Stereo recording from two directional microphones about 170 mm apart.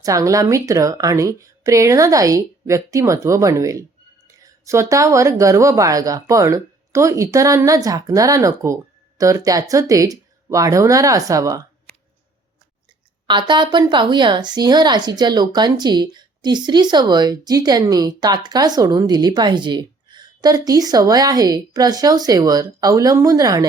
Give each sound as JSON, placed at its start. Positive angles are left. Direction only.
{"t": 0.0, "sound": "speech", "side_deg": -20}
{"t": 13.2, "sound": "speech", "side_deg": -25}